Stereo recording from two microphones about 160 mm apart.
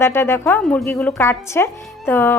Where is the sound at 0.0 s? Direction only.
15° left (ahead or behind).